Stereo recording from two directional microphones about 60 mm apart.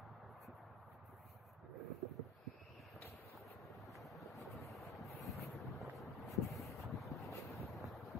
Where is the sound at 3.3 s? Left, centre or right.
Centre.